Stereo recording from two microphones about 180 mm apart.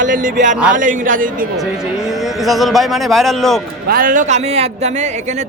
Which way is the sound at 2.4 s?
Centre (ahead or behind).